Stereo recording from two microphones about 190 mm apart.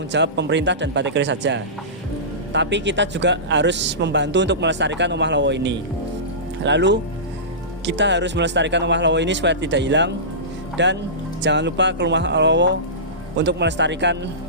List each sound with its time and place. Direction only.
0.1 s speech: 65° right (ahead or behind)